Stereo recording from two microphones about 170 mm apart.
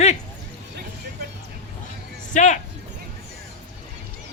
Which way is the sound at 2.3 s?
45° left (ahead or behind).